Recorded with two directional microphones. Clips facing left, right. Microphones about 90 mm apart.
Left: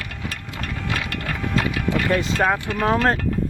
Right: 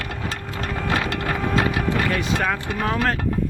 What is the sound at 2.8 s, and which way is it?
Speech, 25° left (ahead or behind).